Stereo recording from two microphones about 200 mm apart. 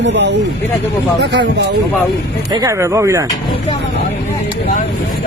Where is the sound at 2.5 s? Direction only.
15° right (ahead or behind).